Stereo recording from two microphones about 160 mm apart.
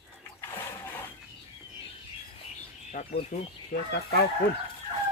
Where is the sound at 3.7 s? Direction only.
75° left (ahead or behind).